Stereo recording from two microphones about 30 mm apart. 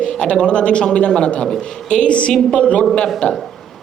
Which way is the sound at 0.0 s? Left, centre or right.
Left.